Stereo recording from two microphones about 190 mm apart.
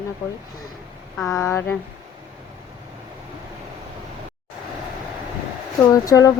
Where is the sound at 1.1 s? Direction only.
Centre (ahead or behind).